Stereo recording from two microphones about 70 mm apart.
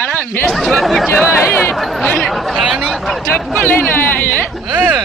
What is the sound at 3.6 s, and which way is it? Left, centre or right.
Speech, left.